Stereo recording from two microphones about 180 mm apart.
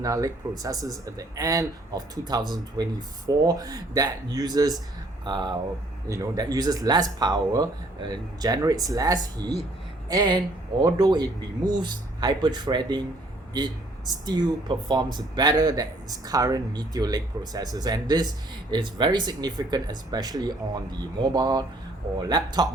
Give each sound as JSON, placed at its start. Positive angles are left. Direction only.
{"t": 0.0, "sound": "speech", "side_deg": -20}